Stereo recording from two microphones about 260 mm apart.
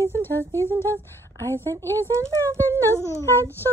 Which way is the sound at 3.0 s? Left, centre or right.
Centre.